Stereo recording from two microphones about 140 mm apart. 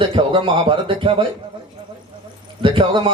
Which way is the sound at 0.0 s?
35° right (ahead or behind).